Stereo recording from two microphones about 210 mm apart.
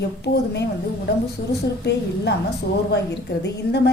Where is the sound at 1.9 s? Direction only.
50° left (ahead or behind).